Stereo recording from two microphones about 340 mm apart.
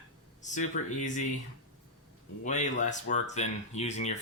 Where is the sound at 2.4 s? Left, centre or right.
Left.